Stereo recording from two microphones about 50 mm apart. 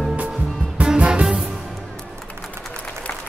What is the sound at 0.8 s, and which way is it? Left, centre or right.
Music, centre.